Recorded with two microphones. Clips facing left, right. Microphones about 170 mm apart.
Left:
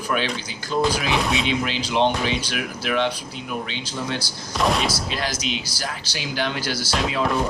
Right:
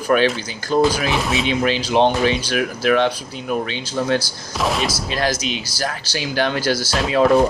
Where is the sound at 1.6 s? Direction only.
45° right (ahead or behind).